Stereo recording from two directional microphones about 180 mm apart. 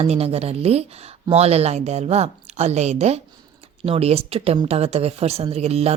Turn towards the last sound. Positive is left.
turn(degrees=-35)  # may be behind; listen again after turning